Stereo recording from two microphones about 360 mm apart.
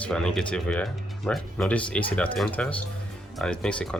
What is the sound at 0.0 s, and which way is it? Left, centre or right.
Speech, centre.